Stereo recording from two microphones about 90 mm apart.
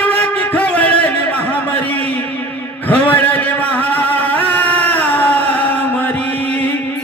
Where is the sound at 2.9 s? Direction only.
15° left (ahead or behind).